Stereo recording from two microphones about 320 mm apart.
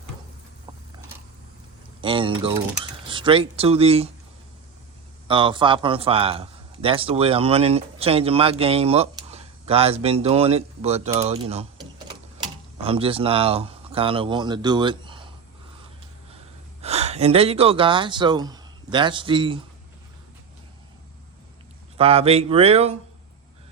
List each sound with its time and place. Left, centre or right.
2.0 s a man's voice: centre
5.3 s a man's voice: centre
12.8 s speech: centre
16.8 s speech: centre
21.9 s speech: centre